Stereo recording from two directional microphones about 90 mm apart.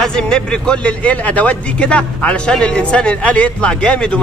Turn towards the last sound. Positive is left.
turn(degrees=10)  # may be behind; listen again after turning